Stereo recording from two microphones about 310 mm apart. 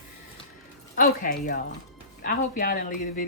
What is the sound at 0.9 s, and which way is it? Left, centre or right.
Speech, left.